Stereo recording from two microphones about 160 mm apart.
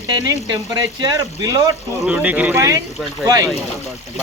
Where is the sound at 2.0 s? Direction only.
10° right (ahead or behind).